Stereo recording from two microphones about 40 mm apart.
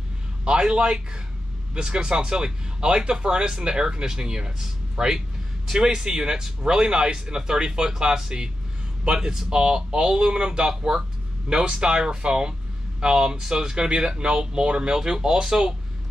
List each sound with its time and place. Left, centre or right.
0.5 s speech: right